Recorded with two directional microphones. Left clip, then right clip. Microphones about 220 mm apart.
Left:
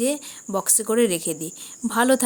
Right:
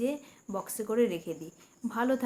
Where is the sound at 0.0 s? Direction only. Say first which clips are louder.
Left 8 dB; 45° left (ahead or behind).